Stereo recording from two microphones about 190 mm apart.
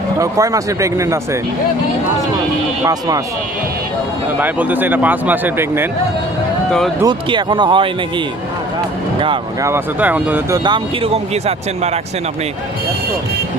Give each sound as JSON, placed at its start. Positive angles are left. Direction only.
{"t": 0.2, "sound": "speech", "side_deg": -20}
{"t": 2.8, "sound": "speech", "side_deg": -20}
{"t": 4.4, "sound": "speech", "side_deg": -10}
{"t": 6.7, "sound": "speech", "side_deg": 5}
{"t": 7.0, "sound": "speech", "side_deg": -25}
{"t": 9.2, "sound": "speech", "side_deg": -25}
{"t": 9.6, "sound": "speech", "side_deg": -10}
{"t": 10.6, "sound": "speech", "side_deg": -25}